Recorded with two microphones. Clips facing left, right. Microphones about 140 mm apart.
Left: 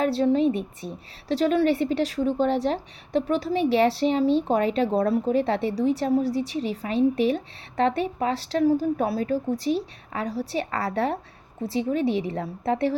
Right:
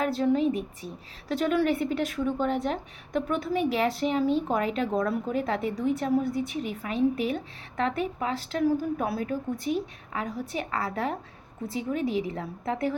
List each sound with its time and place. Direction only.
0.2 s a woman's voice: 35° left (ahead or behind)